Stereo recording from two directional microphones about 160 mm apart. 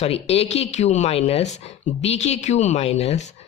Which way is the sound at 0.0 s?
40° left (ahead or behind).